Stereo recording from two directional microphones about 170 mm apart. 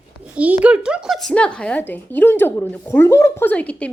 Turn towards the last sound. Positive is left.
turn(degrees=5)  # may be behind; listen again after turning